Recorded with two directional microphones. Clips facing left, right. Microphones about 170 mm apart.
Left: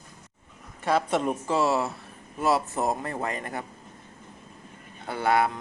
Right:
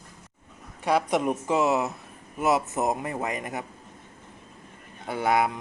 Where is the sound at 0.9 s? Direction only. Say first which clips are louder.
Right 1 dB; 15° right (ahead or behind).